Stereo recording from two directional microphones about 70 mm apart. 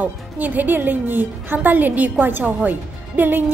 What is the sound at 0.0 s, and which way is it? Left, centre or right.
A woman's voice, right.